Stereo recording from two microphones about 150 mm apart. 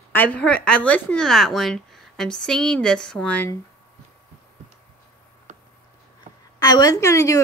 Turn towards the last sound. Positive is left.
turn(degrees=20)  # may be behind; listen again after turning